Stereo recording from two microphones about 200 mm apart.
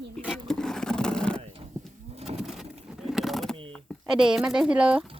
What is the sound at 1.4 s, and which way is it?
Livestock, 30° right (ahead or behind).